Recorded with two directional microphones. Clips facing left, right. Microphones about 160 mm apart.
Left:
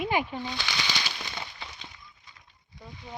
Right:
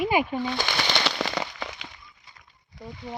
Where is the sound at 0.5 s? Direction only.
45° right (ahead or behind); by 1.9 s 90° right.